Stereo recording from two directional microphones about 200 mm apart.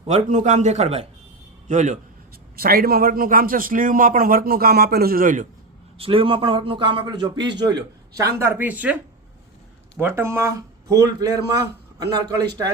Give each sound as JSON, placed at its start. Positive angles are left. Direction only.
{"t": 0.0, "sound": "a man's voice", "side_deg": -35}
{"t": 2.6, "sound": "a man's voice", "side_deg": -50}
{"t": 6.0, "sound": "a man's voice", "side_deg": -25}
{"t": 10.0, "sound": "a man's voice", "side_deg": -10}